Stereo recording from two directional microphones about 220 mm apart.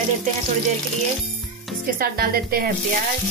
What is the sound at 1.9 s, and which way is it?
Music, 40° right (ahead or behind).